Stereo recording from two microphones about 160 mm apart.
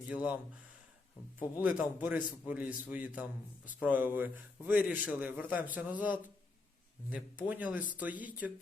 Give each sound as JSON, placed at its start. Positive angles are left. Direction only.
{"t": 0.1, "sound": "a man's voice", "side_deg": -10}
{"t": 1.5, "sound": "a man's voice", "side_deg": -10}